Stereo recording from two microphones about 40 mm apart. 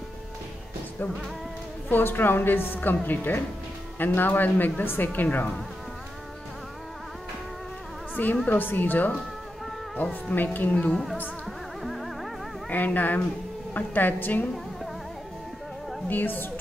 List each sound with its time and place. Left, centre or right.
1.9 s a woman's voice: left
8.5 s speech: left
11.4 s music: centre
12.6 s speech: left
16.1 s speech: left